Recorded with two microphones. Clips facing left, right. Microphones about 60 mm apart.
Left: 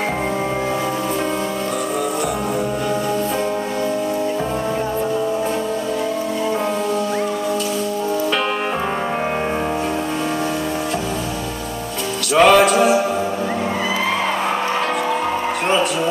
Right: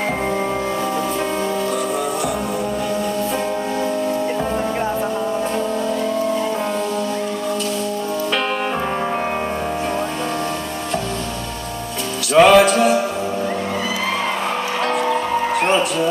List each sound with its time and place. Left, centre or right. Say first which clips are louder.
12.4 s music: right 1 dB; centre